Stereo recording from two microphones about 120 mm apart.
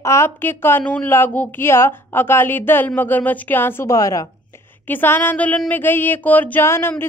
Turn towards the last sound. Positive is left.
turn(degrees=20)  # may be behind; listen again after turning